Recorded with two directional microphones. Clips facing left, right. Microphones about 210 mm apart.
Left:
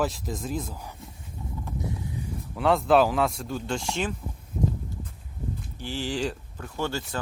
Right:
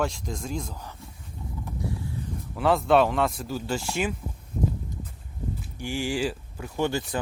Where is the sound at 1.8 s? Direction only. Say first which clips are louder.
Right 3 dB; 20° left (ahead or behind).